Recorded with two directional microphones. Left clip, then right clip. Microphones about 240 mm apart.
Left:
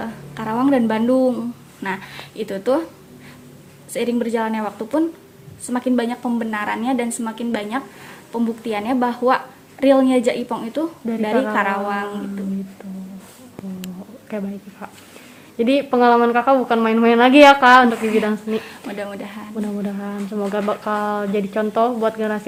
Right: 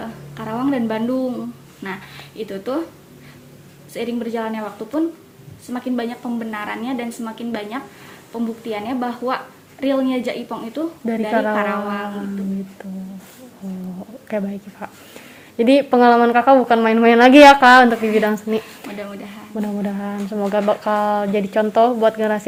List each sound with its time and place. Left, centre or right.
0.0 s a sound: left
1.8 s a woman's voice: left
3.9 s a woman's voice: left
12.8 s a woman's voice: right
14.3 s a woman's voice: centre
18.9 s a woman's voice: left
19.6 s speech: centre